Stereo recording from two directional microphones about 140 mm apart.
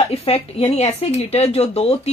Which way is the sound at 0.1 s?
45° left (ahead or behind).